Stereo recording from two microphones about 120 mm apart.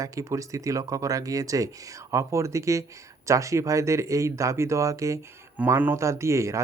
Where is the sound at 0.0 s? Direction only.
25° right (ahead or behind).